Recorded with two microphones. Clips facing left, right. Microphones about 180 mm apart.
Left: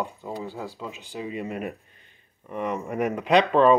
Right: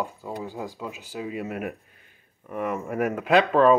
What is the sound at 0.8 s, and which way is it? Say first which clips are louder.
Speech: right 1 dB; 5° right (ahead or behind).